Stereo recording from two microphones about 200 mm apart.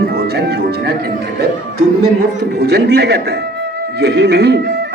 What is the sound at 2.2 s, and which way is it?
Speech, 55° right (ahead or behind).